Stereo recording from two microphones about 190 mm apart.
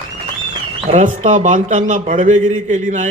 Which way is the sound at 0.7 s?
40° right (ahead or behind).